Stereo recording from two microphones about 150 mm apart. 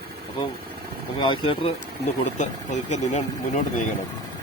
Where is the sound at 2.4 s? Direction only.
55° left (ahead or behind).